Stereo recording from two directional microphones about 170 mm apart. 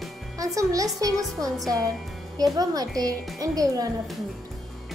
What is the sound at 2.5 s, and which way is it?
A woman's voice, 20° right (ahead or behind).